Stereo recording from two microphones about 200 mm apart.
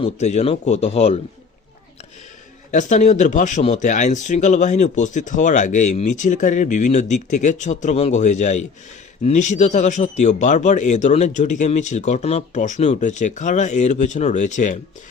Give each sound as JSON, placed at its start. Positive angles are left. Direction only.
{"t": 0.0, "sound": "speech", "side_deg": 35}
{"t": 2.7, "sound": "speech", "side_deg": 35}